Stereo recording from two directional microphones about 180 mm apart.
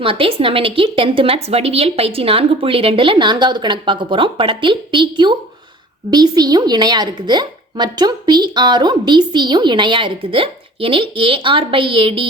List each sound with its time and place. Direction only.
0.0 s a woman's voice: 30° right (ahead or behind)